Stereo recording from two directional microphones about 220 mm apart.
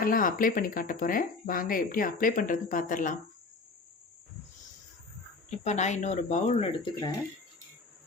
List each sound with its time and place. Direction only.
0.0 s speech: 40° left (ahead or behind)
5.5 s speech: 30° left (ahead or behind)